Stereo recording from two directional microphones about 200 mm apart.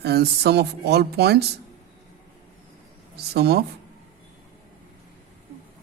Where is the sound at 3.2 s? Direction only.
55° right (ahead or behind).